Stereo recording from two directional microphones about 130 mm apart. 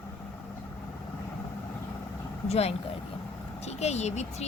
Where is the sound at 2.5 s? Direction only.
50° left (ahead or behind).